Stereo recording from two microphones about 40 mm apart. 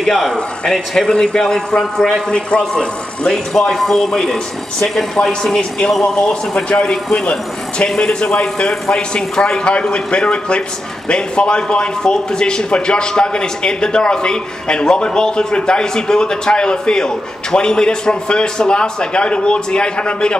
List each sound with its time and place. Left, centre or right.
0.0 s speech: centre
2.3 s speech: left
3.5 s speech: centre; by 20.3 s left